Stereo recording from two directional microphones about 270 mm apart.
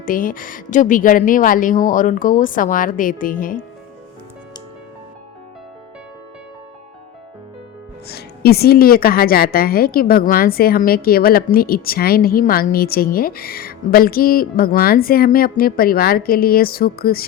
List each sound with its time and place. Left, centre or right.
0.0 s a woman's voice: left
8.0 s a woman's voice: left